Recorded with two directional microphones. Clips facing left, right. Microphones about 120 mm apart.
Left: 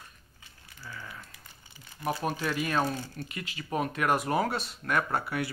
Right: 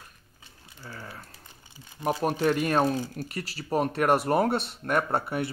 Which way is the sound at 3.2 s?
35° right (ahead or behind).